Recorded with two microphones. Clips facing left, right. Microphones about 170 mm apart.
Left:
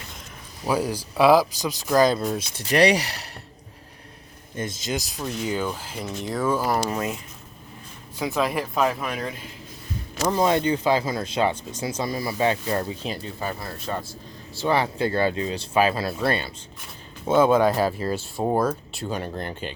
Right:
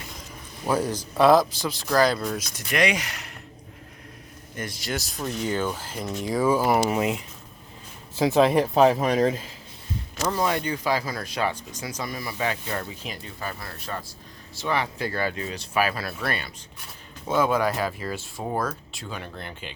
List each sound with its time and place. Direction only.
0.6 s speech: 10° left (ahead or behind); by 3.2 s 35° left (ahead or behind)
4.5 s speech: 20° left (ahead or behind)
5.1 s speech: 5° left (ahead or behind); by 7.2 s 15° right (ahead or behind)
8.1 s speech: 25° right (ahead or behind)
10.2 s speech: 20° left (ahead or behind)
19.1 s speech: 40° left (ahead or behind)